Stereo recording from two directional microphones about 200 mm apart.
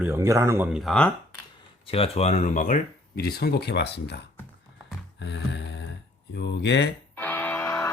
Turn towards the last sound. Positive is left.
turn(degrees=15)  # may be behind; listen again after turning